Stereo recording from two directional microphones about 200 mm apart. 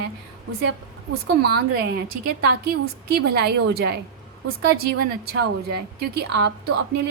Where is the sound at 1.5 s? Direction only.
55° right (ahead or behind).